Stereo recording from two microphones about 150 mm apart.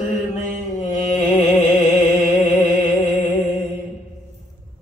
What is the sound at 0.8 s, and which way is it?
Music, 50° left (ahead or behind).